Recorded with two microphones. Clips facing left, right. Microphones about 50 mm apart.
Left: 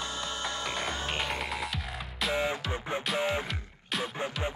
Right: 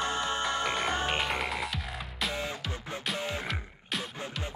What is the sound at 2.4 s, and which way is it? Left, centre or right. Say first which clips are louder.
Music: left 5 dB; centre.